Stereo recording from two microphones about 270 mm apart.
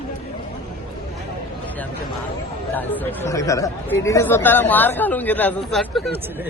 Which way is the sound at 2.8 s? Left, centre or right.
Centre.